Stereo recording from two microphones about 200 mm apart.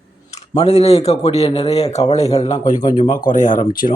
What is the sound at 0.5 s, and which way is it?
A man's voice, 30° left (ahead or behind).